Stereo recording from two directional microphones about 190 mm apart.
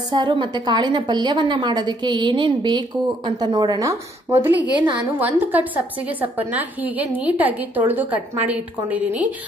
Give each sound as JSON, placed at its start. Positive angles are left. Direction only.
{"t": 0.1, "sound": "a woman's voice", "side_deg": -25}